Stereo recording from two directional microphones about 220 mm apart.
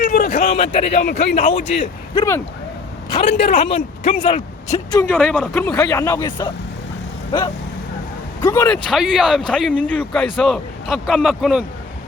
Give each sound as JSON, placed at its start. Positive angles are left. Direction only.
{"t": 0.0, "sound": "a man's voice", "side_deg": 40}
{"t": 3.5, "sound": "speech", "side_deg": 35}
{"t": 4.9, "sound": "speech", "side_deg": 5}
{"t": 8.9, "sound": "speech", "side_deg": 0}